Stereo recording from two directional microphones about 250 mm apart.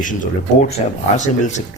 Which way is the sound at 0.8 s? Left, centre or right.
Left.